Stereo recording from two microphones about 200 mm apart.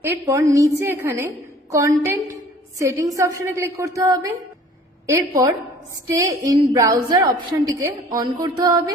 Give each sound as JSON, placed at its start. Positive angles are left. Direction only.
{"t": 0.0, "sound": "a woman's voice", "side_deg": -10}